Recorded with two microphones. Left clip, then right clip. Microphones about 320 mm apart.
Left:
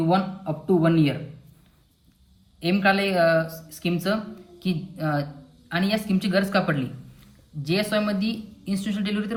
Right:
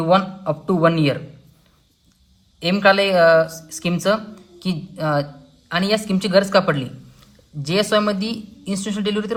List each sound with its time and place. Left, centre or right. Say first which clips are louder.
0.1 s a man's voice: right 7 dB; centre
2.6 s a woman's voice: right 7 dB; centre